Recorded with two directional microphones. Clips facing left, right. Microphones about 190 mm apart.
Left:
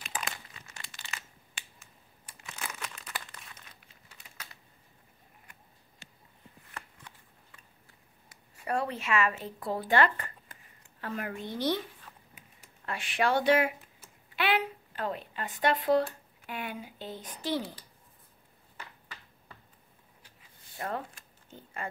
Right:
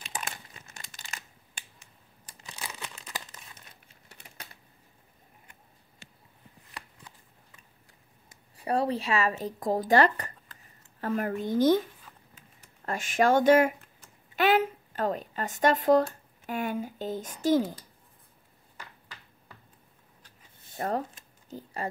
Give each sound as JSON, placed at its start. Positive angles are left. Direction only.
{"t": 0.7, "sound": "crumpling", "side_deg": -45}
{"t": 2.6, "sound": "crumpling", "side_deg": -15}
{"t": 8.5, "sound": "speech", "side_deg": -35}
{"t": 12.0, "sound": "a sound", "side_deg": -5}
{"t": 12.8, "sound": "speech", "side_deg": -45}
{"t": 14.3, "sound": "a sound", "side_deg": -45}
{"t": 16.4, "sound": "speech", "side_deg": -45}
{"t": 20.7, "sound": "speech", "side_deg": -40}
{"t": 21.5, "sound": "a sound", "side_deg": -35}